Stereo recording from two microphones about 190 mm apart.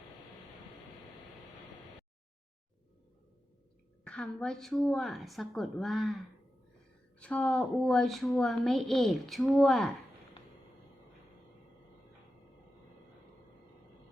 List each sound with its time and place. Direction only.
4.0 s a woman's voice: 5° left (ahead or behind)